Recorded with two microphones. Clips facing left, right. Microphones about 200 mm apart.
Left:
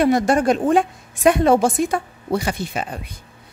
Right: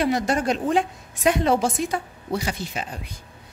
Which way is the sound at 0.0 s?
50° left (ahead or behind).